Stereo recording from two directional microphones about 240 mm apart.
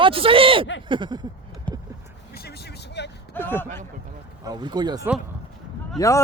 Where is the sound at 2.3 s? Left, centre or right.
Left.